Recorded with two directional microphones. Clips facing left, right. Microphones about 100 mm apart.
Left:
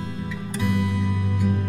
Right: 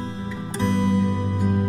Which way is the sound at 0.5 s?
30° right (ahead or behind).